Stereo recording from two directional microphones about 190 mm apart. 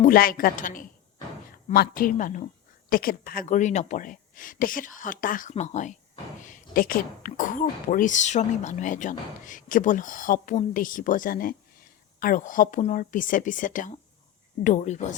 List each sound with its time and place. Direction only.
0.0 s speech: 50° left (ahead or behind)